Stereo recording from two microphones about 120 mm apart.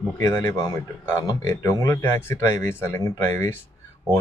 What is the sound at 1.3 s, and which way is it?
Speech, 30° left (ahead or behind).